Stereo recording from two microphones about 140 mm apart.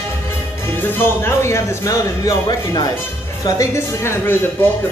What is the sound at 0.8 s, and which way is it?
Speech, 15° left (ahead or behind).